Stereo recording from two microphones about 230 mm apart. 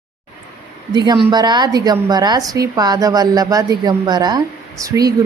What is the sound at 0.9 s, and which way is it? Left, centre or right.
A woman's voice, centre.